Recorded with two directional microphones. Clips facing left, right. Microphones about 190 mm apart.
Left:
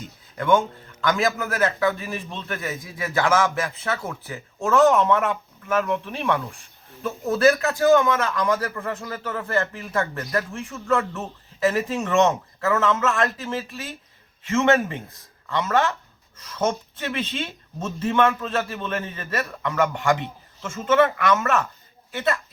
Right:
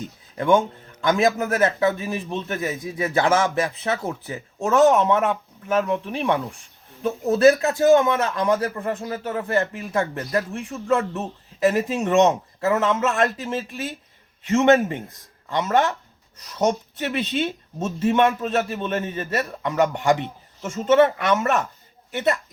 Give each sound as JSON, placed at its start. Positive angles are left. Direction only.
{"t": 0.3, "sound": "speech", "side_deg": -15}